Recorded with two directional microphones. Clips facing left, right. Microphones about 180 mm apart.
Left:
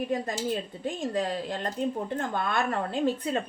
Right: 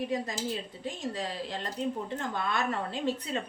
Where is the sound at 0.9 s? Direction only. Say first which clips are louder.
Left 6 dB; 50° left (ahead or behind).